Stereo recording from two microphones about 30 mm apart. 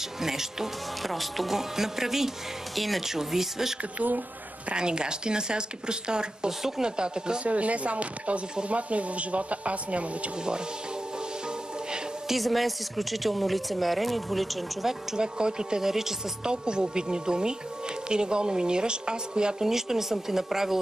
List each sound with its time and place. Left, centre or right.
0.2 s speech: centre
1.0 s speech: centre
1.5 s speech: centre
2.7 s speech: centre
3.1 s speech: centre
4.7 s speech: right
7.4 s speech: right
12.4 s speech: centre
15.1 s speech: right
15.8 s speech: centre
16.4 s speech: right
19.6 s speech: centre